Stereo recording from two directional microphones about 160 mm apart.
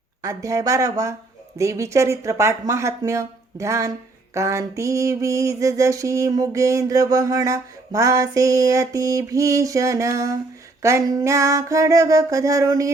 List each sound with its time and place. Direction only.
0.2 s mantra: 20° right (ahead or behind)